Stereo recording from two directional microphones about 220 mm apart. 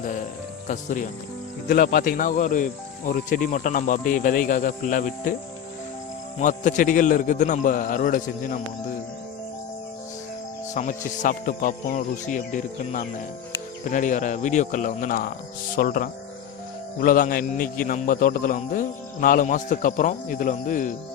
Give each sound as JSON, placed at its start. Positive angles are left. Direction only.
{"t": 0.0, "sound": "a man's voice", "side_deg": 35}
{"t": 6.4, "sound": "a man's voice", "side_deg": 35}
{"t": 10.8, "sound": "a man's voice", "side_deg": 35}